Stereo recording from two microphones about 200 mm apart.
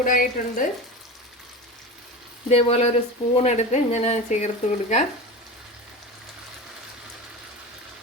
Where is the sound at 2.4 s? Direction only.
30° left (ahead or behind).